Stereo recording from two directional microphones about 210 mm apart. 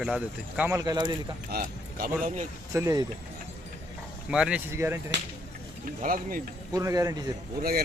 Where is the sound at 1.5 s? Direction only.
40° right (ahead or behind).